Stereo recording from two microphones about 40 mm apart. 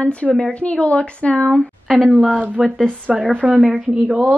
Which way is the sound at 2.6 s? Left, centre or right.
Right.